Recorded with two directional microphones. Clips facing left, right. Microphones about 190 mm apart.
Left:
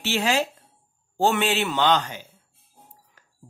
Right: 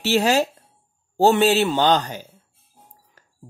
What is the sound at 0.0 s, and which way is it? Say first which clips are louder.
Speech: right 5 dB; 40° right (ahead or behind).